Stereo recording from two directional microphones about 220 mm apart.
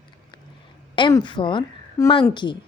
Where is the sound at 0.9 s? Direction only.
20° left (ahead or behind).